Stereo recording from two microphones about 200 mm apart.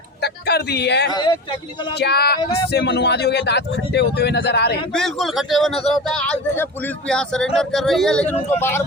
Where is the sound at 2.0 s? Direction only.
55° left (ahead or behind).